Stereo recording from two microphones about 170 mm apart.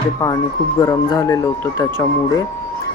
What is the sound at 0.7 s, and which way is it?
Speech, 20° left (ahead or behind).